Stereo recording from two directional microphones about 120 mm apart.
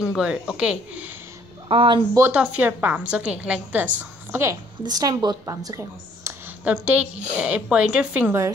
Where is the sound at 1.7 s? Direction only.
45° right (ahead or behind).